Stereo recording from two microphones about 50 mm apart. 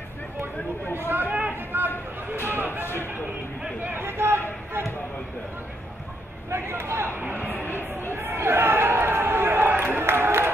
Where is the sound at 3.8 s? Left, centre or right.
Right.